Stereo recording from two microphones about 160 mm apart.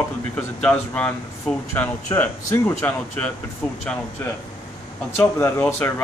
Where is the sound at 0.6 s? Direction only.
10° left (ahead or behind).